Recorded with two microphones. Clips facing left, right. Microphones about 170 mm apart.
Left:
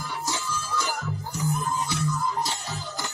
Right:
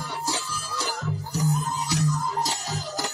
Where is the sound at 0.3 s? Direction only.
35° right (ahead or behind).